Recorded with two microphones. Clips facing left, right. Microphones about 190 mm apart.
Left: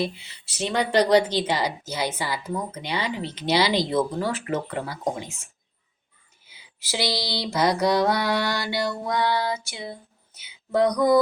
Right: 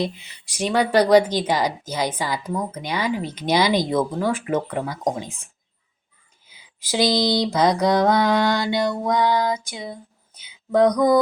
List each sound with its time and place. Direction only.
0.0 s speech: 15° right (ahead or behind)
6.9 s mantra: 20° right (ahead or behind)
9.6 s speech: 15° right (ahead or behind)
10.8 s mantra: 20° right (ahead or behind)